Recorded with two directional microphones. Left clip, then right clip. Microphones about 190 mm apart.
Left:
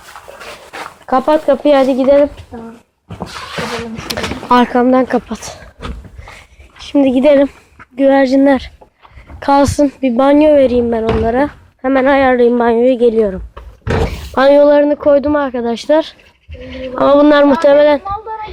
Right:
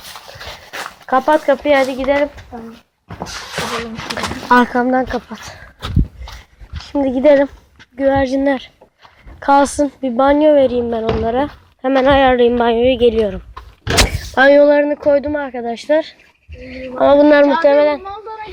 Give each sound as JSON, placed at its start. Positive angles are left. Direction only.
{"t": 1.0, "sound": "speech", "side_deg": 15}
{"t": 1.6, "sound": "speech", "side_deg": 40}
{"t": 4.1, "sound": "a sound", "side_deg": 30}
{"t": 4.4, "sound": "speech", "side_deg": 20}
{"t": 5.0, "sound": "speech", "side_deg": 35}
{"t": 6.8, "sound": "speech", "side_deg": 20}
{"t": 11.0, "sound": "a woman's voice", "side_deg": 0}
{"t": 11.3, "sound": "speech", "side_deg": 10}
{"t": 11.8, "sound": "a woman's voice", "side_deg": 0}
{"t": 14.3, "sound": "speech", "side_deg": 20}